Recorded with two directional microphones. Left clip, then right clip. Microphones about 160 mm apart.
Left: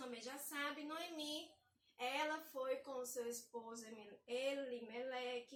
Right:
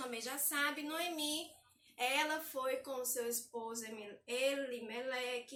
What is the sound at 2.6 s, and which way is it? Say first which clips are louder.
A woman's voice: right 4 dB; 5° right (ahead or behind).